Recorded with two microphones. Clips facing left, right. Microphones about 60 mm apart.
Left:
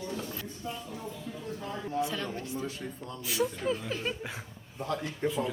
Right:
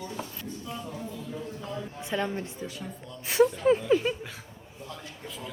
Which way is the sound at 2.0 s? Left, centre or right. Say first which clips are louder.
Right 5 dB; right.